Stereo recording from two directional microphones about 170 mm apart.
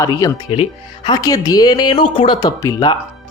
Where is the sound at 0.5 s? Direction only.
30° left (ahead or behind).